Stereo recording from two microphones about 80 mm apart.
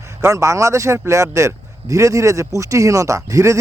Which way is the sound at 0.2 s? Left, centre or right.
Right.